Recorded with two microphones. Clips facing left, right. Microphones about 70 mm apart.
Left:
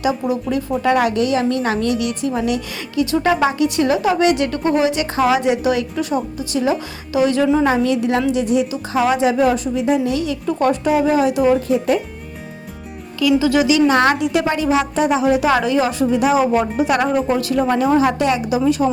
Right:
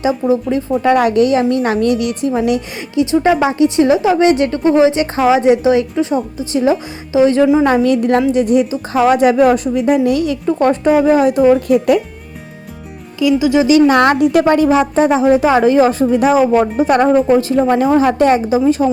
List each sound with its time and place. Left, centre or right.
0.0 s a woman's voice: right
0.8 s a woman's voice: right
2.9 s a woman's voice: right
7.6 s a woman's voice: right
13.4 s a woman's voice: right
13.7 s a woman's voice: right